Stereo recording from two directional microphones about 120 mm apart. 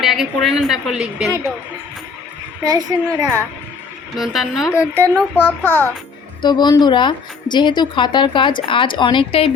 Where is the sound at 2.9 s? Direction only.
30° right (ahead or behind).